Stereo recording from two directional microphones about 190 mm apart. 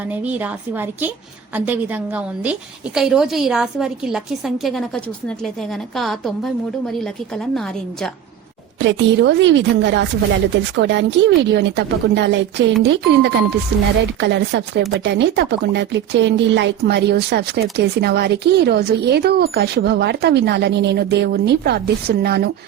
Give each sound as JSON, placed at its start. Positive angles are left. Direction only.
{"t": 0.0, "sound": "a woman's voice", "side_deg": -10}
{"t": 8.8, "sound": "a woman's voice", "side_deg": -70}